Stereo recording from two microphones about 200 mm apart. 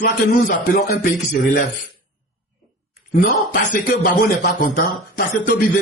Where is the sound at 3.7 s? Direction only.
45° left (ahead or behind).